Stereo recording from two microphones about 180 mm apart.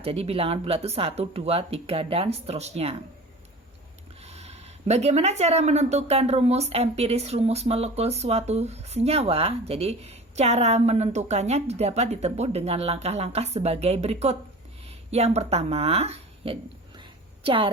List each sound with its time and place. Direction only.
0.0 s speech: 35° right (ahead or behind)
4.2 s speech: 35° right (ahead or behind)
17.0 s a sound: 30° right (ahead or behind)